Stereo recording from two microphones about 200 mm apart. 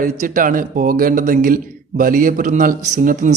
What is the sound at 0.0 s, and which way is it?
A man's voice, 45° right (ahead or behind).